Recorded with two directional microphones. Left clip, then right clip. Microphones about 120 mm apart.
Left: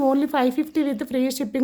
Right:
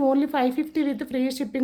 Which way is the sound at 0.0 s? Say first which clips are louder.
Left 2 dB; 30° left (ahead or behind).